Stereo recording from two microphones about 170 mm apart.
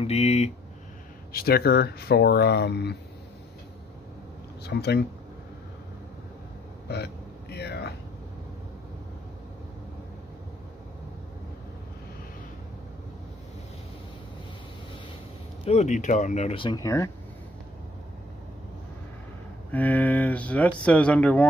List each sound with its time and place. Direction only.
0.0 s speech: 40° left (ahead or behind)
1.3 s speech: 65° left (ahead or behind)
4.6 s speech: 75° left (ahead or behind)
6.9 s a sound: 75° left (ahead or behind)
15.6 s speech: 40° left (ahead or behind)
16.5 s speech: 25° left (ahead or behind)
19.7 s a sound: 10° left (ahead or behind)